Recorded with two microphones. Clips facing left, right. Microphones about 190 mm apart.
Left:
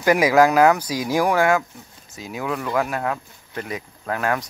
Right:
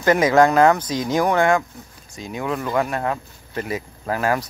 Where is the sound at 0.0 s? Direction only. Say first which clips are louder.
Right 1 dB; 10° left (ahead or behind).